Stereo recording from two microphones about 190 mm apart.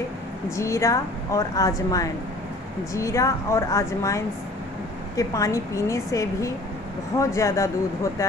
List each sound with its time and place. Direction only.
0.6 s a woman's voice: 15° left (ahead or behind)